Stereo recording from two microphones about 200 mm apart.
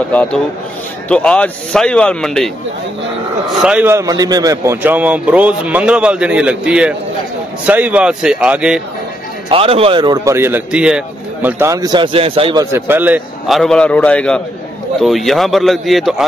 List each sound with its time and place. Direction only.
0.1 s a man's voice: 5° left (ahead or behind)
3.5 s a man's voice: 5° right (ahead or behind)
9.5 s speech: 30° right (ahead or behind)
12.7 s a man's voice: 10° right (ahead or behind)